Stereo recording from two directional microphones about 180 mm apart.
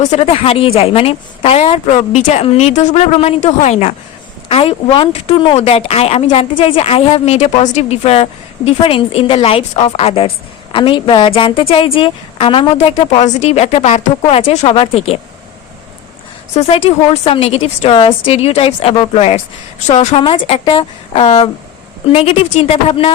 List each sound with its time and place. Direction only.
0.0 s a woman's voice: 35° left (ahead or behind)
16.6 s a woman's voice: 30° left (ahead or behind)